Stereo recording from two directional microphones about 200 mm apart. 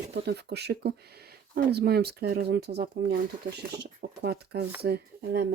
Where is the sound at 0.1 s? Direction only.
55° right (ahead or behind).